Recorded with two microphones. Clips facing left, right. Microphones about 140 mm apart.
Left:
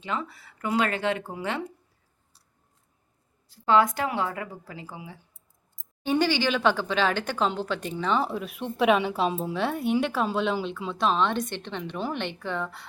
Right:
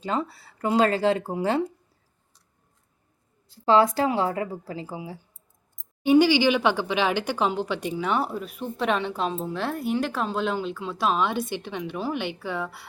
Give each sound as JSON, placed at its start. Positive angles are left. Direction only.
{"t": 0.0, "sound": "speech", "side_deg": -35}
{"t": 3.5, "sound": "a woman's voice", "side_deg": -30}
{"t": 6.0, "sound": "speech", "side_deg": -10}